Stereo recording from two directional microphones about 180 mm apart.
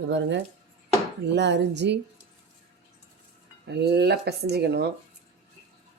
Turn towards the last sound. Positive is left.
turn(degrees=-65)  # may be behind; listen again after turning